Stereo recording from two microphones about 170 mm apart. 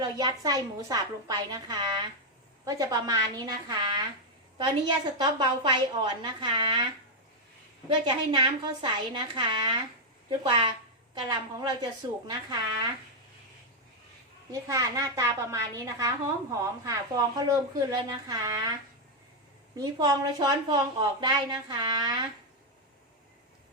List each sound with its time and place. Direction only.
0.0 s a woman's voice: 25° right (ahead or behind)
5.1 s a woman's voice: 25° right (ahead or behind)
7.9 s a woman's voice: 30° right (ahead or behind)
14.5 s a woman's voice: 20° right (ahead or behind)
19.7 s a woman's voice: 20° right (ahead or behind)